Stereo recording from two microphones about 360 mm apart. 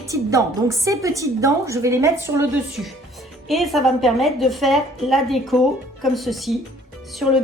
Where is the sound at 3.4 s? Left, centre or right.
Centre.